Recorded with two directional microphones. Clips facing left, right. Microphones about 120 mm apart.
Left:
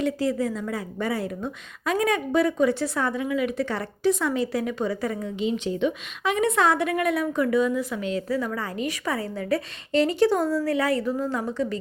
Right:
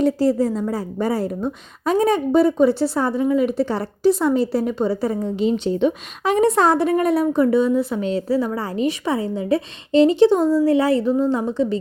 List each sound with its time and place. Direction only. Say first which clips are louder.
0.0 s a woman's voice: right 7 dB; 40° right (ahead or behind)